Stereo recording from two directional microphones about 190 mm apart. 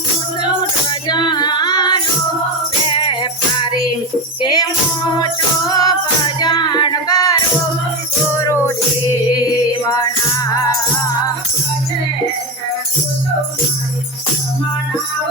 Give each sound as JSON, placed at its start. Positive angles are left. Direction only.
{"t": 0.4, "sound": "music", "side_deg": 20}
{"t": 9.3, "sound": "music", "side_deg": 20}